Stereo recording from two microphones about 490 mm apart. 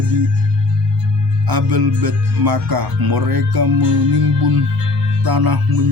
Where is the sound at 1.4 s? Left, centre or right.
Right.